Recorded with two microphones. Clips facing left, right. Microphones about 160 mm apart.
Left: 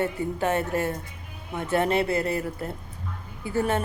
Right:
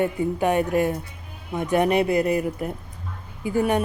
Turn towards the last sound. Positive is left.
turn(degrees=-15)  # may be behind; listen again after turning